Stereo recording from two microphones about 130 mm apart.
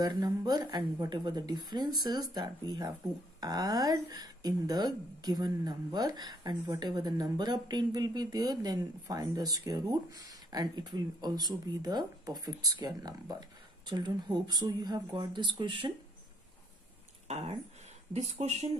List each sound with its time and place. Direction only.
0.0 s a woman's voice: 30° right (ahead or behind)
17.3 s speech: 55° right (ahead or behind)